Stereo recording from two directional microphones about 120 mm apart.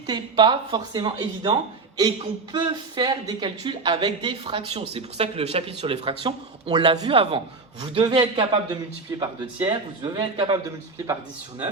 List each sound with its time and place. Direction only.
0.1 s speech: 40° right (ahead or behind); by 5.7 s 60° right (ahead or behind)
5.8 s speech: 45° right (ahead or behind)
7.1 s a man's voice: 50° right (ahead or behind)
7.8 s speech: 40° right (ahead or behind)
10.9 s speech: 30° right (ahead or behind)